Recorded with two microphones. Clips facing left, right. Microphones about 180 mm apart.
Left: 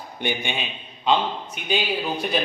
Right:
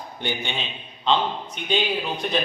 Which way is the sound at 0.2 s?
15° left (ahead or behind).